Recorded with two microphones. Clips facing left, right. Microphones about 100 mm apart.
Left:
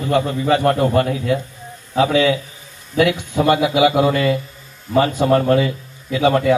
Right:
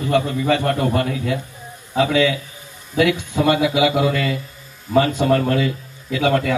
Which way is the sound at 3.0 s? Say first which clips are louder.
Left 1 dB; 20° left (ahead or behind).